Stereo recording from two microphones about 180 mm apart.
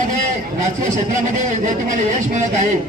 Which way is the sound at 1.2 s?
45° right (ahead or behind).